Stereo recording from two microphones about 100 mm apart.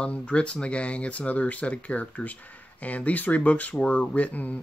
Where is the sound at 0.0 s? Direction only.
10° left (ahead or behind).